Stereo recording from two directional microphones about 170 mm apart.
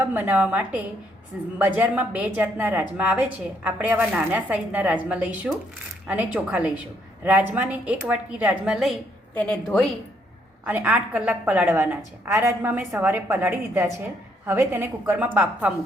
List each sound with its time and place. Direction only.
0.0 s a woman's voice: 10° right (ahead or behind)
9.3 s a woman's voice: 10° left (ahead or behind)
10.7 s a woman's voice: 10° right (ahead or behind)